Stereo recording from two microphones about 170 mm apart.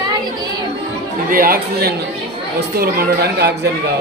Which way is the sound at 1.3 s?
55° right (ahead or behind).